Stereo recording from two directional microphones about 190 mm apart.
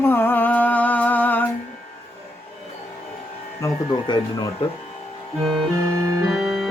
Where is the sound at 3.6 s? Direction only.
25° left (ahead or behind).